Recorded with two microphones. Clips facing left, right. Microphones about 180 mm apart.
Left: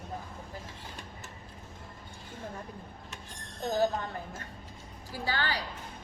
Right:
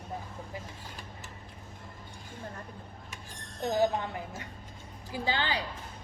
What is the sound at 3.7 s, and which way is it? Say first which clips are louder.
A woman's voice: right 1 dB; 15° right (ahead or behind).